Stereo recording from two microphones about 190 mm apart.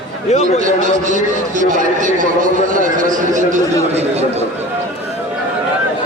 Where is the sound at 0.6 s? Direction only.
40° right (ahead or behind).